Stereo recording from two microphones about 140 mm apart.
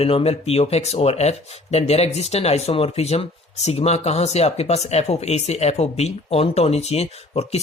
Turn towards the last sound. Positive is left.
turn(degrees=45)  # may be behind; listen again after turning